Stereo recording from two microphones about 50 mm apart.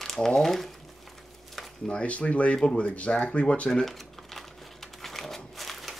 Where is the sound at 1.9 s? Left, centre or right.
Left.